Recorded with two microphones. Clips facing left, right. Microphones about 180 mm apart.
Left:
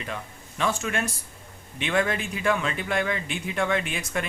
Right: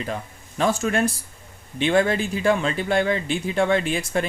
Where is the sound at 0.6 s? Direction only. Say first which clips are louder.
Right 6 dB; 35° right (ahead or behind).